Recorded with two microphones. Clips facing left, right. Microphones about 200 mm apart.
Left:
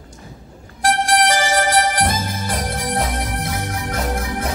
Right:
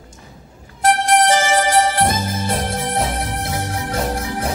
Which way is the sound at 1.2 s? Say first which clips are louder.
Right 2 dB; 20° right (ahead or behind).